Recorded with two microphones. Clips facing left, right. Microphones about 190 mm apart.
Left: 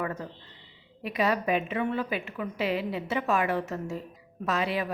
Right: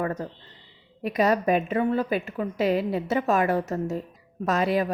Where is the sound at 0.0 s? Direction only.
40° right (ahead or behind).